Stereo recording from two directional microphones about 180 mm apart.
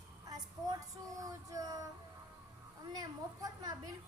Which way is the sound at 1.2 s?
20° right (ahead or behind).